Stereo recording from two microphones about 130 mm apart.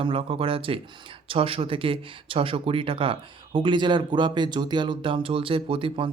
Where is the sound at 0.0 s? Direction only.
45° right (ahead or behind).